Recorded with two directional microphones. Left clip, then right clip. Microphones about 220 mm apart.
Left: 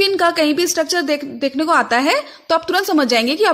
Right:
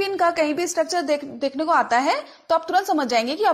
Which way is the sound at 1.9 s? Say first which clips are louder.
Left 4 dB; 35° left (ahead or behind).